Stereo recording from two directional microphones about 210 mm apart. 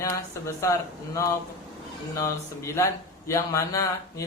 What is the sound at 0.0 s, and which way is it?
Speech, 15° left (ahead or behind).